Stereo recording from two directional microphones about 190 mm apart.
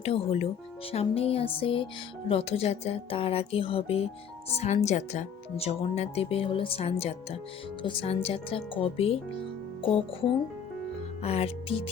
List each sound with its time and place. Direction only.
0.0 s speech: 30° left (ahead or behind)